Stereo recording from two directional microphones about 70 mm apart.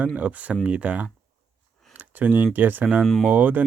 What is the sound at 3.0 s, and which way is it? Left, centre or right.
Speech, centre.